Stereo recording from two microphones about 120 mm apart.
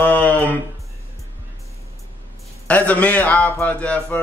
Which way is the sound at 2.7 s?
10° left (ahead or behind).